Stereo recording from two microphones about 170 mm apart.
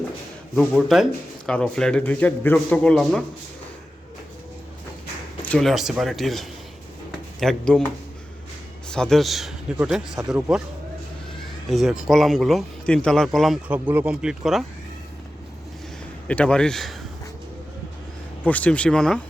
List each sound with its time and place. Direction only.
0.5 s a man's voice: 5° left (ahead or behind)
5.5 s a man's voice: centre (ahead or behind)
8.9 s a man's voice: 5° left (ahead or behind)
11.7 s a man's voice: centre (ahead or behind)
13.7 s speech: 10° right (ahead or behind)
16.2 s a man's voice: 5° left (ahead or behind)
18.4 s speech: 10° left (ahead or behind)